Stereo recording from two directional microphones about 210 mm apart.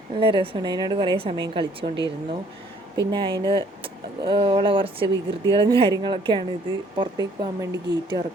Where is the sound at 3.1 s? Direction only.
25° right (ahead or behind).